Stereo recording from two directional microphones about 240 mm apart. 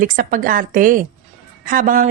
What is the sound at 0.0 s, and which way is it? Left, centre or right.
A woman's voice, right.